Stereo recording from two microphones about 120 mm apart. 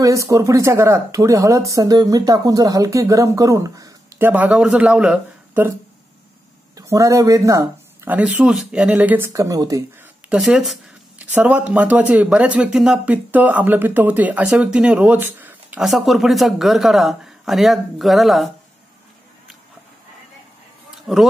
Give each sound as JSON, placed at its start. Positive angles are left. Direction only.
{"t": 0.0, "sound": "speech", "side_deg": -25}
{"t": 4.2, "sound": "speech", "side_deg": -15}
{"t": 6.8, "sound": "speech", "side_deg": -25}
{"t": 8.1, "sound": "a man's voice", "side_deg": -10}
{"t": 9.3, "sound": "speech", "side_deg": -30}
{"t": 10.3, "sound": "speech", "side_deg": -5}
{"t": 11.1, "sound": "a man's voice", "side_deg": -15}
{"t": 15.8, "sound": "speech", "side_deg": 0}
{"t": 21.1, "sound": "speech", "side_deg": 0}